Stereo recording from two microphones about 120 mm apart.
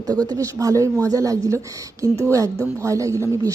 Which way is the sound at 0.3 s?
30° right (ahead or behind).